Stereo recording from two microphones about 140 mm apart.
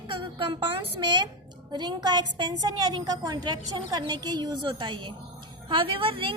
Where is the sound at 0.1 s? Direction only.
35° right (ahead or behind).